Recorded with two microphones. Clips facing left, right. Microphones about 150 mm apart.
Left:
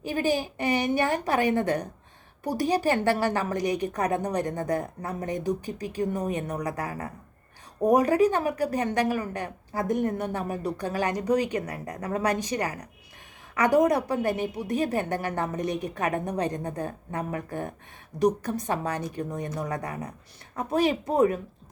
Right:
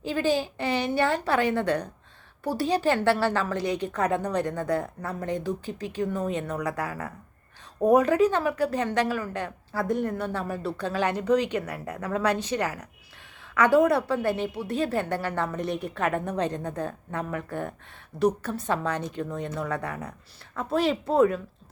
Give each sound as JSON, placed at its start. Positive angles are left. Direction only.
{"t": 0.0, "sound": "speech", "side_deg": 15}
{"t": 7.9, "sound": "speech", "side_deg": 10}
{"t": 11.6, "sound": "a woman's voice", "side_deg": 35}
{"t": 12.2, "sound": "speech", "side_deg": 15}
{"t": 18.2, "sound": "speech", "side_deg": 15}